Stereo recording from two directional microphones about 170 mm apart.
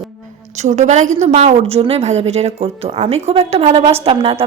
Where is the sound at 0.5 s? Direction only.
45° right (ahead or behind).